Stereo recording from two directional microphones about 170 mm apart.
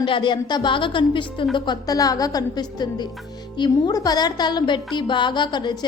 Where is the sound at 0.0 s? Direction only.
30° left (ahead or behind).